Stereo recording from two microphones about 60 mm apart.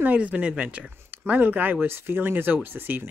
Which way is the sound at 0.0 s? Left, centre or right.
Right.